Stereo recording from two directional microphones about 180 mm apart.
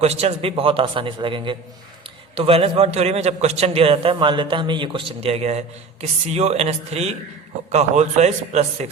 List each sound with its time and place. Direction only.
0.0 s a man's voice: 35° right (ahead or behind)